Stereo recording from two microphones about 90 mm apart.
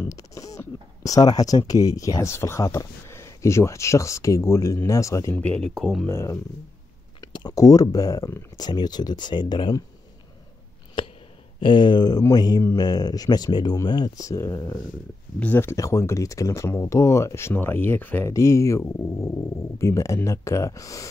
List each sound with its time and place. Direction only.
0.1 s a sound: 40° left (ahead or behind)
1.7 s speech: 45° left (ahead or behind)
5.3 s speech: 10° left (ahead or behind)
6.0 s speech: 30° left (ahead or behind)
7.2 s speech: 45° left (ahead or behind)
8.5 s speech: 50° left (ahead or behind)
11.6 s speech: 60° left (ahead or behind)
14.1 s speech: 35° left (ahead or behind)
15.3 s speech: 20° left (ahead or behind)
15.7 s speech: 35° left (ahead or behind)
18.3 s speech: 35° left (ahead or behind)